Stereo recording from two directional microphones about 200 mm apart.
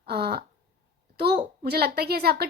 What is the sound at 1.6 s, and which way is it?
Speech, 50° right (ahead or behind).